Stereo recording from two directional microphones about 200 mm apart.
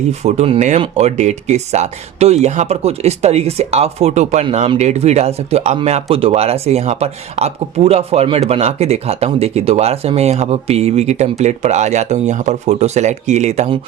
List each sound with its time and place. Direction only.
0.1 s speech: 35° right (ahead or behind)